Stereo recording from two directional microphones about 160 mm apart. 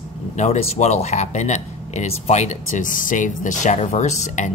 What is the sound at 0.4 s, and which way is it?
Speech, 40° left (ahead or behind).